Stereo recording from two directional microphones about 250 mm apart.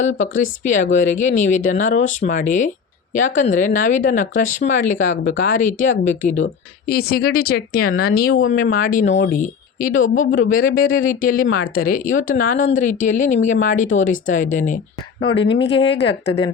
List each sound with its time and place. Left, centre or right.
0.0 s speech: left
9.9 s speech: left
10.3 s speech: left
11.6 s speech: left
11.9 s speech: left
15.2 s speech: left